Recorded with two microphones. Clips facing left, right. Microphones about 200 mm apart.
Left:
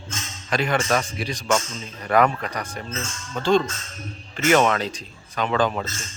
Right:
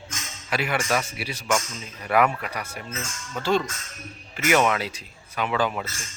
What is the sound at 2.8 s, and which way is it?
Speech, 30° left (ahead or behind).